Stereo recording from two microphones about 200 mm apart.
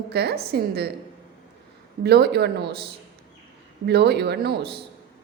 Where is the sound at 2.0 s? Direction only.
55° right (ahead or behind).